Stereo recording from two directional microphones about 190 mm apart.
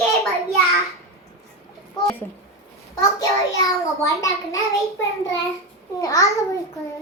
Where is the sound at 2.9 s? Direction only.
20° left (ahead or behind).